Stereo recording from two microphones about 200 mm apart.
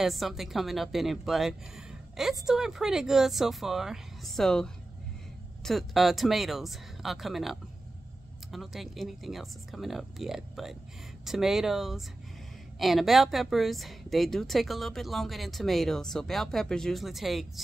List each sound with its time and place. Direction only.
0.0 s a woman's voice: centre (ahead or behind)